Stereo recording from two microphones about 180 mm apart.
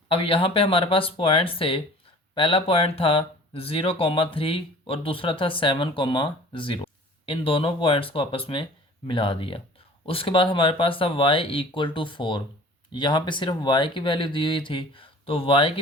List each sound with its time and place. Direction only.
0.1 s speech: 30° left (ahead or behind)